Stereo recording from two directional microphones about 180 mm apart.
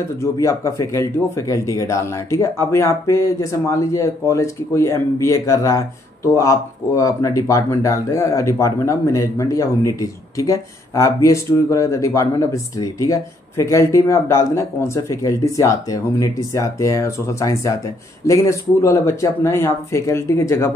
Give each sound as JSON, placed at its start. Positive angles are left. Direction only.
{"t": 0.2, "sound": "speech", "side_deg": 15}